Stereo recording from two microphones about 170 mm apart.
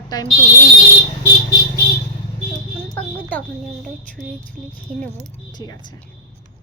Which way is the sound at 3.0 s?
10° left (ahead or behind).